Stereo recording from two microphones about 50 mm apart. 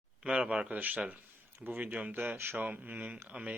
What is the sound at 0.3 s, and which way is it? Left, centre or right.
Speech, right.